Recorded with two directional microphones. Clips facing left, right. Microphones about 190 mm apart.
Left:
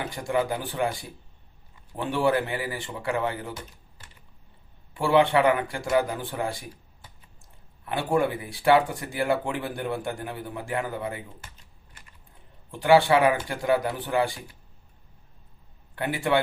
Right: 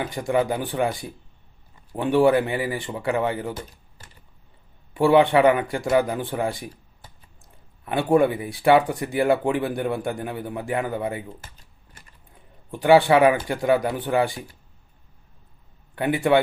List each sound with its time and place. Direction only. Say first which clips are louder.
0.3 s speech: right 4 dB; 20° right (ahead or behind)
2.0 s speech: right 6 dB; 15° right (ahead or behind)
3.5 s typing: right 5 dB; 40° right (ahead or behind)
4.9 s speech: right 4 dB; 20° right (ahead or behind)
7.9 s speech: right 6 dB; 20° right (ahead or behind)
11.3 s speech: right 2 dB; 35° right (ahead or behind)
12.8 s speech: right 3 dB; 20° right (ahead or behind)
16.0 s speech: right 5 dB; 20° right (ahead or behind)